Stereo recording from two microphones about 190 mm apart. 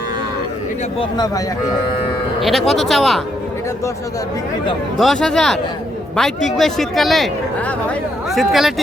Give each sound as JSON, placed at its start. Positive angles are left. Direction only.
{"t": 0.9, "sound": "a man's voice", "side_deg": 20}
{"t": 2.4, "sound": "a man's voice", "side_deg": 0}
{"t": 4.9, "sound": "a man's voice", "side_deg": 0}
{"t": 8.3, "sound": "a man's voice", "side_deg": 0}